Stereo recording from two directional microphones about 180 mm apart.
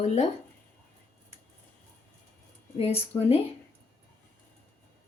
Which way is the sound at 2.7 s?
35° left (ahead or behind).